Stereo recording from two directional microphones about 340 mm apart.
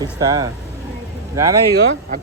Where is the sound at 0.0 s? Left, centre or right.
Centre.